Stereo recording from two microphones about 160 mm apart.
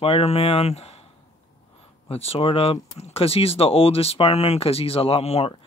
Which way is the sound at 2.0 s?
40° left (ahead or behind).